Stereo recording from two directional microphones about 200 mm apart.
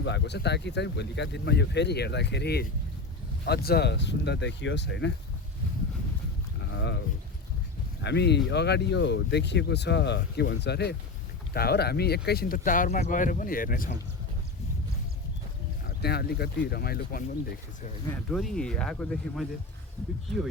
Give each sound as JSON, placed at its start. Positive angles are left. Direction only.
{"t": 0.0, "sound": "speech", "side_deg": 60}
{"t": 6.7, "sound": "a sound", "side_deg": 65}
{"t": 8.0, "sound": "speech", "side_deg": 55}
{"t": 16.0, "sound": "speech", "side_deg": 55}
{"t": 18.3, "sound": "speech", "side_deg": 0}